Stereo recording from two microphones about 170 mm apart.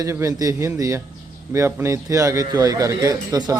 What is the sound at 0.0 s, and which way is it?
Speech, 20° right (ahead or behind).